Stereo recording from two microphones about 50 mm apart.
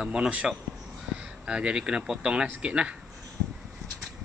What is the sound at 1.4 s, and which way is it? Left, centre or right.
Speech, centre.